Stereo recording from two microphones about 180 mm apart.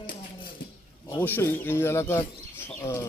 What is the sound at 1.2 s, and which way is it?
Speech, 10° left (ahead or behind).